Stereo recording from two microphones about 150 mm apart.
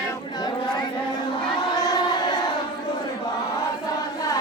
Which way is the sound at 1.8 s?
25° left (ahead or behind).